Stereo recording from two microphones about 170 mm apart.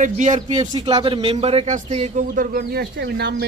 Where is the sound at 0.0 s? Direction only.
45° right (ahead or behind).